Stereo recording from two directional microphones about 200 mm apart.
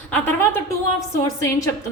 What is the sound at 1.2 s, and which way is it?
Speech, 15° left (ahead or behind).